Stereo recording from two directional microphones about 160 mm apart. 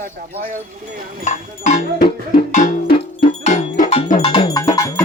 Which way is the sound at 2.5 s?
50° left (ahead or behind).